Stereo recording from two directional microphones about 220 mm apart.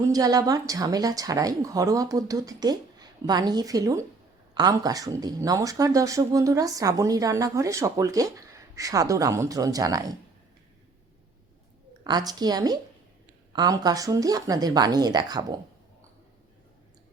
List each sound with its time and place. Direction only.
0.1 s speech: 15° right (ahead or behind)
12.0 s speech: 15° right (ahead or behind)